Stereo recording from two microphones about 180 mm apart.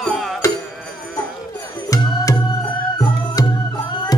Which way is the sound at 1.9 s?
20° left (ahead or behind).